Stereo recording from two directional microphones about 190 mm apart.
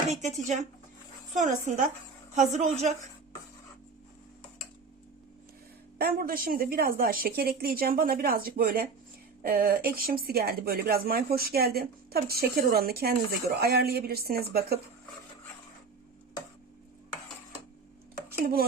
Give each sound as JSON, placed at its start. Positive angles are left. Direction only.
{"t": 0.1, "sound": "a woman's voice", "side_deg": -40}
{"t": 6.0, "sound": "speech", "side_deg": -50}
{"t": 18.3, "sound": "a sound", "side_deg": -55}